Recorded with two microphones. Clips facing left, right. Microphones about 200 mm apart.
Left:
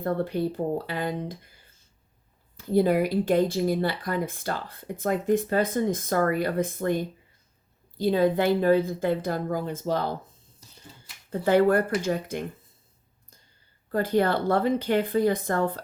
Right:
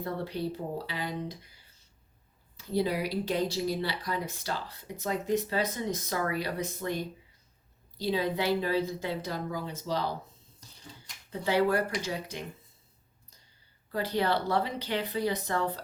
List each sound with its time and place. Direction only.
0.0 s speech: 50° left (ahead or behind)
10.6 s finger snapping: 5° left (ahead or behind)
11.3 s speech: 50° left (ahead or behind)
13.9 s speech: 50° left (ahead or behind)